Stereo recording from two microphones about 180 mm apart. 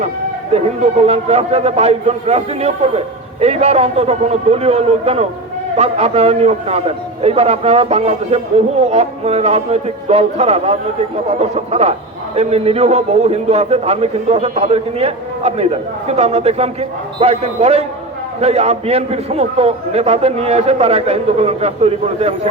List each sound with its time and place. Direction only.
0.5 s a man's voice: 35° right (ahead or behind)